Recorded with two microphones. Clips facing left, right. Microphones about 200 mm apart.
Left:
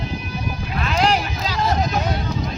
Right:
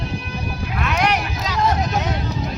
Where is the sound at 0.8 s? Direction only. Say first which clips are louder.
Left 1 dB; 30° left (ahead or behind).